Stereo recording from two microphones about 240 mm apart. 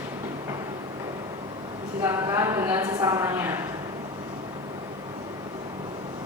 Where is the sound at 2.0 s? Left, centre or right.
Centre.